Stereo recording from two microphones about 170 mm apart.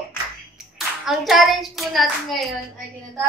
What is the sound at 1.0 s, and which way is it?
Hands, centre (ahead or behind).